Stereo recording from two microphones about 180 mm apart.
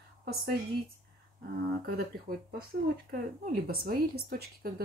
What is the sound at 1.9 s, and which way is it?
Speech, 60° right (ahead or behind).